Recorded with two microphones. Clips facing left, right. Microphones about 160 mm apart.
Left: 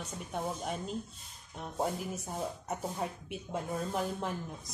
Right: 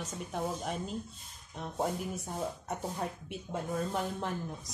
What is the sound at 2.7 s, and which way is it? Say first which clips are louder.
A woman's voice: even; centre (ahead or behind).